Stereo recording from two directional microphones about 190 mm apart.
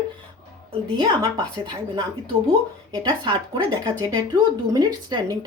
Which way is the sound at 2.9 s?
25° right (ahead or behind).